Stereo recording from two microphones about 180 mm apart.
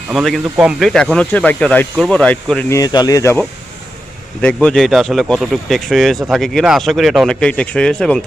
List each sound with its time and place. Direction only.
0.1 s speech: centre (ahead or behind)
2.7 s speech: 20° left (ahead or behind)
4.4 s speech: 5° left (ahead or behind)